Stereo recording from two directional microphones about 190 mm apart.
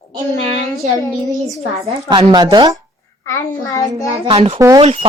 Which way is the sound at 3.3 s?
15° left (ahead or behind).